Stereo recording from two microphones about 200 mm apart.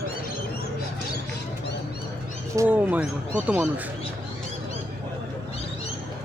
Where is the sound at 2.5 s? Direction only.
10° right (ahead or behind).